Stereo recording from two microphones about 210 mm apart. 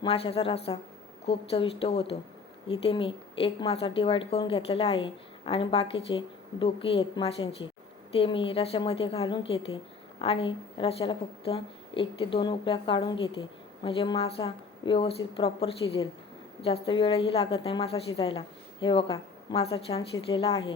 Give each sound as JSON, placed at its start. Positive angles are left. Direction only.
{"t": 0.0, "sound": "a woman's voice", "side_deg": 25}